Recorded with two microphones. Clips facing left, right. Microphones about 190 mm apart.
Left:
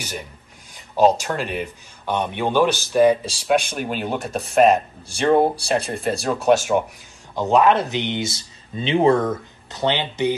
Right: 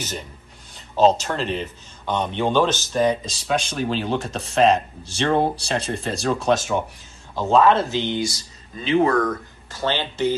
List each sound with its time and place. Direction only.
0.7 s speech: 10° left (ahead or behind)